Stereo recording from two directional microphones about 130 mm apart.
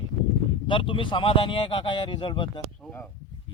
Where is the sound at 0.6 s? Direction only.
40° left (ahead or behind).